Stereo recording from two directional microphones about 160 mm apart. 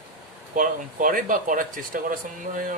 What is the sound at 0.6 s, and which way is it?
Speech, 60° right (ahead or behind).